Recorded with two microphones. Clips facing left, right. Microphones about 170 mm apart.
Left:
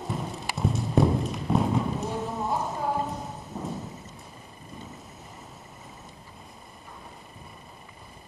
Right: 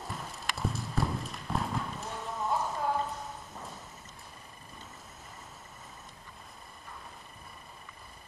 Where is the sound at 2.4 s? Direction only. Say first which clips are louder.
Right 1 dB; 20° left (ahead or behind).